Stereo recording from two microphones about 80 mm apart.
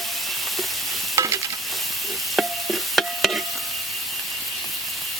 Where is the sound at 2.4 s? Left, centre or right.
Centre.